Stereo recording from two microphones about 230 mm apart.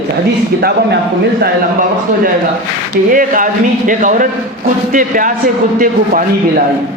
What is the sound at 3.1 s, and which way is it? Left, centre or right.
A man's voice, right.